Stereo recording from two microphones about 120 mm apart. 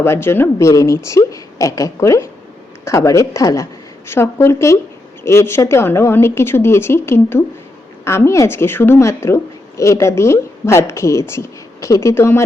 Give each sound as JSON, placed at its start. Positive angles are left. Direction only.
{"t": 0.0, "sound": "a woman's voice", "side_deg": 20}